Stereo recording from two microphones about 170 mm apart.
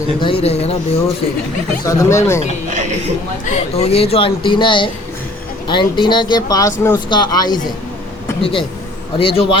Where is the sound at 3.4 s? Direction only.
40° left (ahead or behind).